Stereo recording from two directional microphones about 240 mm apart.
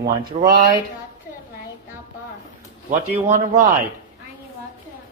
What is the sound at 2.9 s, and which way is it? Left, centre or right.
Speech, right.